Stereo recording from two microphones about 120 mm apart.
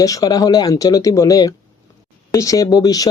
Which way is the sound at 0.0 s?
30° left (ahead or behind).